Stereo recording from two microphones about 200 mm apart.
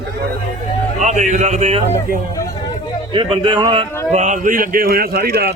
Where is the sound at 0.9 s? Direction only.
35° right (ahead or behind).